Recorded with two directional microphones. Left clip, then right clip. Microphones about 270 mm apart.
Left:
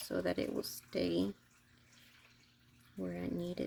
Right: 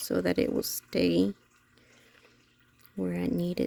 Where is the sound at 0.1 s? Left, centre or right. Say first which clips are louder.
Right 9 dB; right.